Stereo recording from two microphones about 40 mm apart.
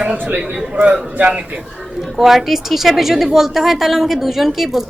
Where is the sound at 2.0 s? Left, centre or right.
Centre.